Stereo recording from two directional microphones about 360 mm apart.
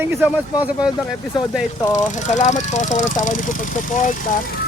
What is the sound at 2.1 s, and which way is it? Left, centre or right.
Speech, centre.